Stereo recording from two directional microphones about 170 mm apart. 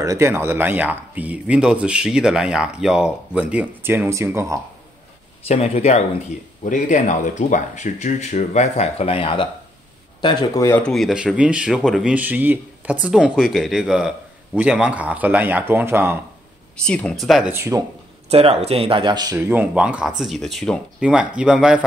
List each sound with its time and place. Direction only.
0.0 s speech: 20° right (ahead or behind)
5.5 s speech: 40° left (ahead or behind); by 10.8 s 20° left (ahead or behind)
10.8 s speech: centre (ahead or behind); by 16.2 s 15° right (ahead or behind)
16.7 s speech: 5° left (ahead or behind)
17.5 s speech: 15° right (ahead or behind)
18.3 s speech: 40° right (ahead or behind)
19.3 s speech: 10° right (ahead or behind)